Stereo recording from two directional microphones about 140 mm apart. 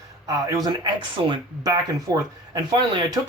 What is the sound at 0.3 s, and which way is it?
Speech, 25° right (ahead or behind).